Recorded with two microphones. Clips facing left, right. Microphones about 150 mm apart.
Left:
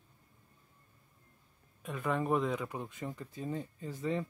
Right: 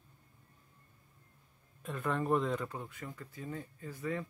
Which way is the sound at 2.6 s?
20° left (ahead or behind).